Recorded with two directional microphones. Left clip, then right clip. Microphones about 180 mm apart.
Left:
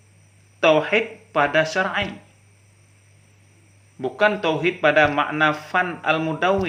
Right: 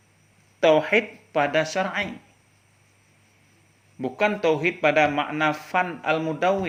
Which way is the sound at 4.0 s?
35° right (ahead or behind).